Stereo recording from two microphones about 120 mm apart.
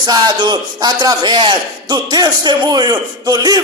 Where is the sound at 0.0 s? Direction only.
35° right (ahead or behind).